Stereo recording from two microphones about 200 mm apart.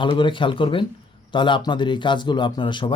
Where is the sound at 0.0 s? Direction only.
25° left (ahead or behind).